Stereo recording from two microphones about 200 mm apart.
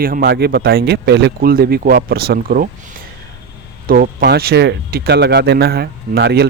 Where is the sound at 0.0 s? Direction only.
45° right (ahead or behind).